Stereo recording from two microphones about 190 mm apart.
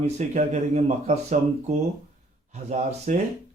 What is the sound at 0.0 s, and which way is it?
Speech, 35° right (ahead or behind).